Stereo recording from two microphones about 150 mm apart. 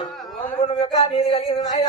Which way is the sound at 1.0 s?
40° left (ahead or behind).